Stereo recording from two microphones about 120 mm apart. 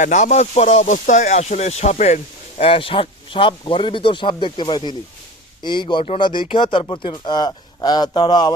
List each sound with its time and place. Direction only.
0.0 s speech: 85° left; by 8.5 s 35° left (ahead or behind)